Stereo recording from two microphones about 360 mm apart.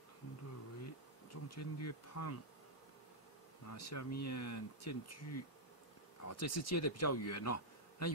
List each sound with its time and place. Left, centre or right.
1.3 s speech: left
3.6 s speech: left